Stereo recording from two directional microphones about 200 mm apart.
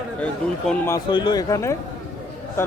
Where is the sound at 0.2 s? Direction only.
5° left (ahead or behind).